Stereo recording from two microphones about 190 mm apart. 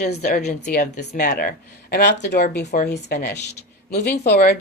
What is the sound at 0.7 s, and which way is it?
Speech, 55° left (ahead or behind).